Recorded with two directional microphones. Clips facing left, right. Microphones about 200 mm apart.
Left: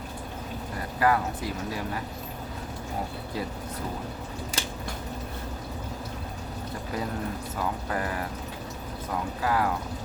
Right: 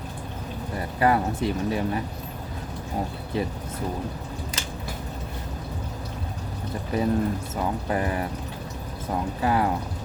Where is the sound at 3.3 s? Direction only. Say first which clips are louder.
Right 6 dB; 25° right (ahead or behind).